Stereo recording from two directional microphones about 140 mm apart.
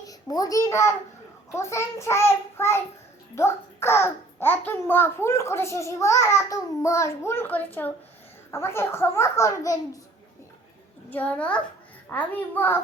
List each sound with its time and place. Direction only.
0.0 s a child's voice: 25° left (ahead or behind)
11.1 s a child's voice: 10° left (ahead or behind)